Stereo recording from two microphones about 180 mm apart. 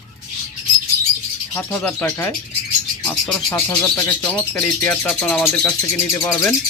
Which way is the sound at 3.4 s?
15° left (ahead or behind).